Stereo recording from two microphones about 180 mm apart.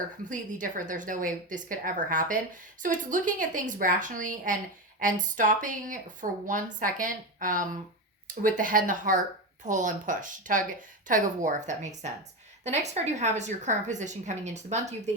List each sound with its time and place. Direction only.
0.3 s a woman's voice: 45° right (ahead or behind)